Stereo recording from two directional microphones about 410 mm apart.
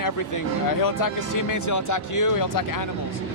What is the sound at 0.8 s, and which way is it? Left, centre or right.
Speech, left.